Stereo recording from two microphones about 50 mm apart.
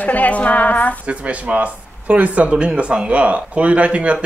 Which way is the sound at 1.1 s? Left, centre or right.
Right.